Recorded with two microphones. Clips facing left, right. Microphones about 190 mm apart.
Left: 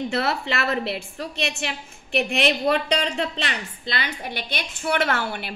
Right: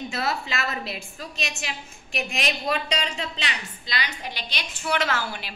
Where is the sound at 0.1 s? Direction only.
60° left (ahead or behind).